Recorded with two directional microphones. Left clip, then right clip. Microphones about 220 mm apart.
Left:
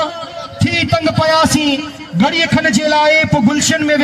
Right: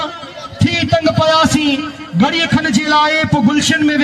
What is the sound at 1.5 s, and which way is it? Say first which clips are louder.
A man's voice: even; 5° left (ahead or behind).